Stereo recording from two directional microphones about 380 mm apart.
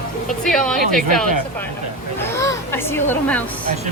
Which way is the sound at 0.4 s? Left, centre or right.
Centre.